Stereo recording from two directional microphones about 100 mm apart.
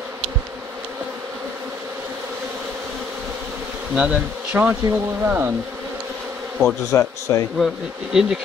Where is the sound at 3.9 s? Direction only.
10° right (ahead or behind).